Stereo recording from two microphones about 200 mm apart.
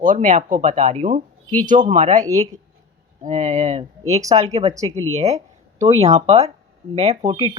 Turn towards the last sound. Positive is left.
turn(degrees=-25)  # may be behind; listen again after turning